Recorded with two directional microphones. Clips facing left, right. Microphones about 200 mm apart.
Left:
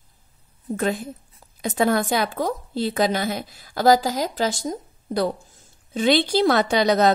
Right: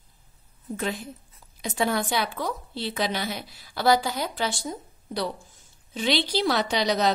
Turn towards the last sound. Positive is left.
turn(degrees=50)  # may be behind; listen again after turning